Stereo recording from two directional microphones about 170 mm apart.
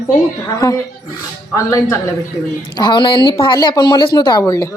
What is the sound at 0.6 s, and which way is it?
A man's voice, 20° left (ahead or behind).